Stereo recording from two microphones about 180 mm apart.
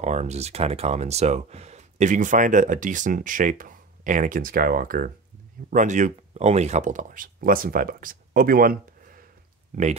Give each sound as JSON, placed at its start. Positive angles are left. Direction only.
{"t": 0.0, "sound": "speech", "side_deg": -40}